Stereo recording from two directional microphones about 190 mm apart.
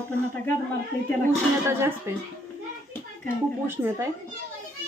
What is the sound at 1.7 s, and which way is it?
Speech, 15° right (ahead or behind).